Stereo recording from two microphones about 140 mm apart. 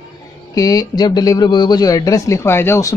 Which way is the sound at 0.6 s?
25° left (ahead or behind).